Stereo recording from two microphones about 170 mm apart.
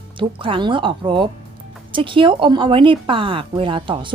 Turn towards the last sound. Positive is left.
turn(degrees=-30)  # may be behind; listen again after turning